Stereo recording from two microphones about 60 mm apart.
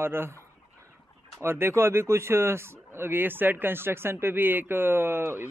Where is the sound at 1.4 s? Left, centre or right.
Right.